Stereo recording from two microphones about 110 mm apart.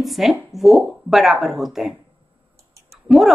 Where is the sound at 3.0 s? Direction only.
Centre (ahead or behind).